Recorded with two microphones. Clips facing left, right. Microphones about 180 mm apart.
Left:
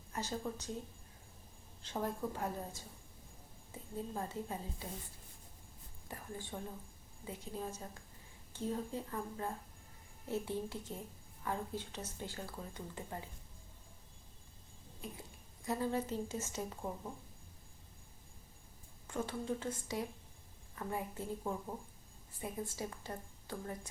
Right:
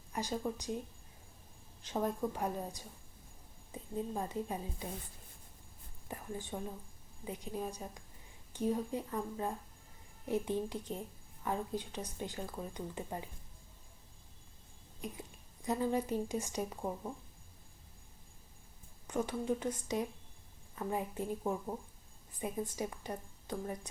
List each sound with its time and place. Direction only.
0.1 s speech: 15° right (ahead or behind)
1.9 s a woman's voice: 15° right (ahead or behind)
6.1 s a woman's voice: 20° right (ahead or behind)
15.0 s speech: 15° right (ahead or behind)
19.0 s a woman's voice: 15° right (ahead or behind)